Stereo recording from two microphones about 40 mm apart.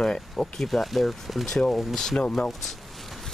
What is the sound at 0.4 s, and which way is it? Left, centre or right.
Speech, centre.